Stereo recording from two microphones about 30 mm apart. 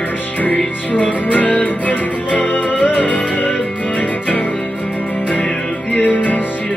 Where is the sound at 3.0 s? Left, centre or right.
Left.